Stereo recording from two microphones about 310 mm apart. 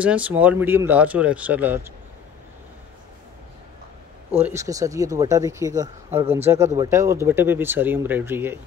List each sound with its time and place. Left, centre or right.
0.0 s speech: centre
4.4 s speech: centre